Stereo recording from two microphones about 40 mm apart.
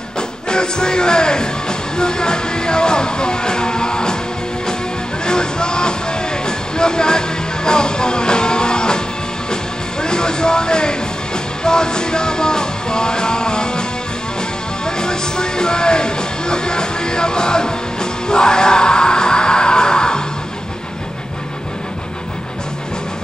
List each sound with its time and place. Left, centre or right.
0.5 s music: centre
5.2 s music: centre
14.9 s music: centre